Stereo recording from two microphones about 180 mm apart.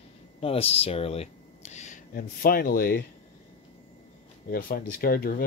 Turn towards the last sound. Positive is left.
turn(degrees=55)  # may be behind; listen again after turning